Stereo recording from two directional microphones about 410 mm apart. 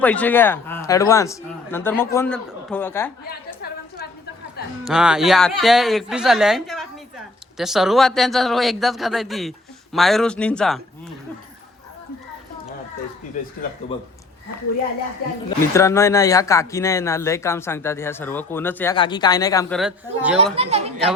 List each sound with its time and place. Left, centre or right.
0.0 s speech: centre
3.2 s a sound: left
4.9 s speech: centre
15.4 s speech: centre
20.6 s speech: centre